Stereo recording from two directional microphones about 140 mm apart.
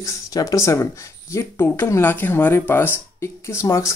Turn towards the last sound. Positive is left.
turn(degrees=20)  # may be behind; listen again after turning